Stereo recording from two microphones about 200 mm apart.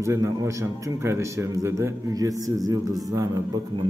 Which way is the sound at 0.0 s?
15° right (ahead or behind).